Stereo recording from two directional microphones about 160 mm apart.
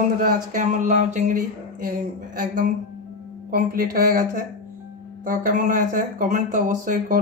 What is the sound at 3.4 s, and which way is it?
Speech, 65° right (ahead or behind).